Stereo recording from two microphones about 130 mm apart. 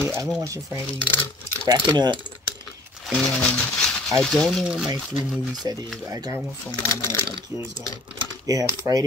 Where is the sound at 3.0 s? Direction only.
5° left (ahead or behind).